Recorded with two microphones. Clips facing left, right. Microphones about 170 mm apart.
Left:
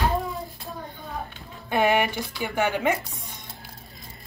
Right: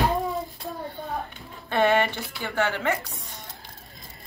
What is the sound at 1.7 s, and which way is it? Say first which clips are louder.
Speech: even; 10° left (ahead or behind).